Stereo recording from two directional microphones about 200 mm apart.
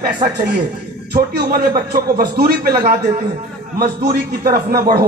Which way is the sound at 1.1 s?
50° right (ahead or behind).